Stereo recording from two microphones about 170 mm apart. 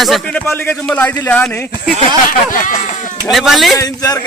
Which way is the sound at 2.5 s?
50° left (ahead or behind).